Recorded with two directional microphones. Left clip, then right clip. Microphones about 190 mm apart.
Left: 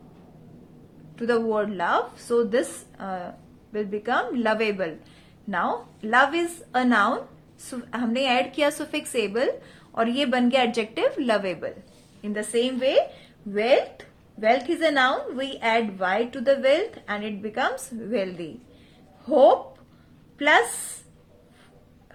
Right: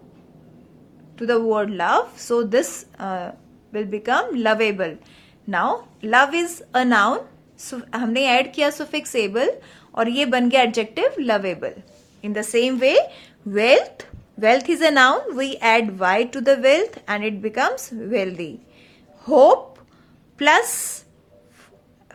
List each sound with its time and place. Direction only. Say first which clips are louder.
1.1 s a woman's voice: right 4 dB; 15° right (ahead or behind)
19.2 s a woman's voice: right 4 dB; 40° right (ahead or behind)